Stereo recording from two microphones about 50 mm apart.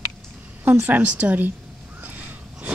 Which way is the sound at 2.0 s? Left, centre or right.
Right.